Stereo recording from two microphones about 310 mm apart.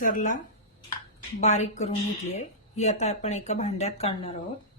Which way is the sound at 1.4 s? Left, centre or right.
Left.